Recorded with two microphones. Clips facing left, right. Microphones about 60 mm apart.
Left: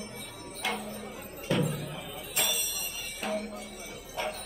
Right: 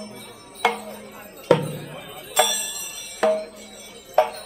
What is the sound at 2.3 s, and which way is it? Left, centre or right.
Music, right.